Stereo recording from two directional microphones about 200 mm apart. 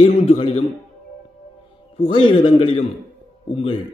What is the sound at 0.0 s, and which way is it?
Speech, 30° left (ahead or behind).